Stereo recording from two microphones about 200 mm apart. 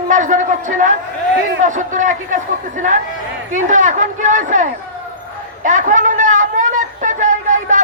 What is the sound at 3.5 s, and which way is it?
A woman's voice, 35° right (ahead or behind).